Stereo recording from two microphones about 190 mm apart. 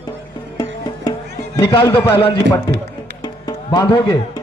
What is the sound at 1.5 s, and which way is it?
A man's voice, 25° left (ahead or behind).